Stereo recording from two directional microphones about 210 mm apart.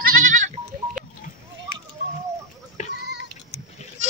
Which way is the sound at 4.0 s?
35° right (ahead or behind).